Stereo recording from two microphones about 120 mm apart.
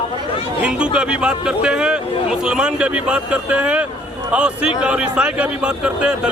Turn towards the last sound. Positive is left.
turn(degrees=-10)  # may be behind; listen again after turning